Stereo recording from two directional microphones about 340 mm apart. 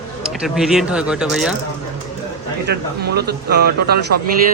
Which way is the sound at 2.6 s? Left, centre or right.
Right.